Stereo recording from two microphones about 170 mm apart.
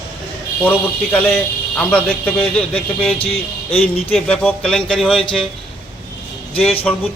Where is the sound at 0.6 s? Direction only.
10° left (ahead or behind).